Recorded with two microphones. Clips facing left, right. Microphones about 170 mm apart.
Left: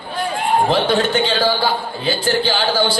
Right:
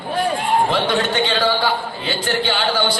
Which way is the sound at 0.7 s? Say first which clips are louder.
Left 3 dB; 30° left (ahead or behind).